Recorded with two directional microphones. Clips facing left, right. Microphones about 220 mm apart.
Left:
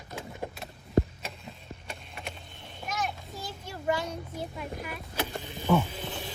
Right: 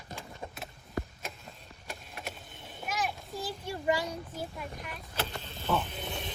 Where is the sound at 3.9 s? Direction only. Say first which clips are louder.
Left 1 dB; 10° right (ahead or behind).